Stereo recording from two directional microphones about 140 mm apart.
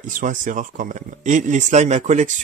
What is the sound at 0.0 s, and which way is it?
Speech, 65° right (ahead or behind).